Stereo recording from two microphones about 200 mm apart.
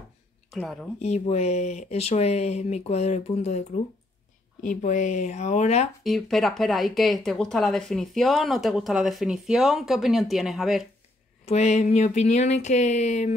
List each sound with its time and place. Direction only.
0.5 s a woman's voice: centre (ahead or behind)
1.0 s speech: 35° left (ahead or behind)
6.0 s speech: centre (ahead or behind)
11.4 s speech: 35° left (ahead or behind)